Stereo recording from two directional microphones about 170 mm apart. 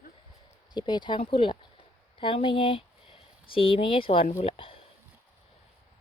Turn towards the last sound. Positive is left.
turn(degrees=30)  # may be behind; listen again after turning